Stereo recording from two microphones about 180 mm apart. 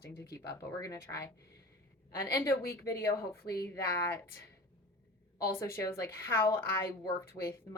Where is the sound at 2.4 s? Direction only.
15° left (ahead or behind).